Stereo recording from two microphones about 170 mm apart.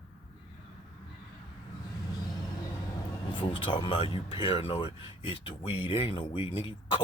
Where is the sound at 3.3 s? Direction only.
30° left (ahead or behind).